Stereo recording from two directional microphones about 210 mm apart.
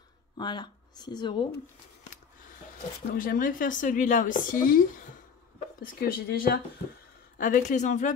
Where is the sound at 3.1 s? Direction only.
40° left (ahead or behind).